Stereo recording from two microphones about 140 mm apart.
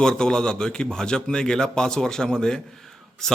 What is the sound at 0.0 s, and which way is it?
A man's voice, 5° left (ahead or behind).